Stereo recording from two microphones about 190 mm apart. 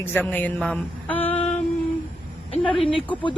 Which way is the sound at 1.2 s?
30° left (ahead or behind).